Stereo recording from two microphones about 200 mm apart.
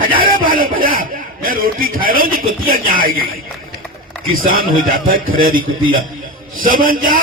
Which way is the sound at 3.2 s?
45° right (ahead or behind).